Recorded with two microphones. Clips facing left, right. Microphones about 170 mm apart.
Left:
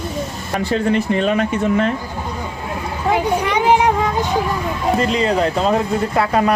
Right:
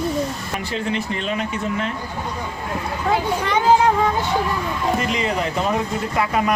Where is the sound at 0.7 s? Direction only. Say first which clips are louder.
Left 8 dB; 50° left (ahead or behind).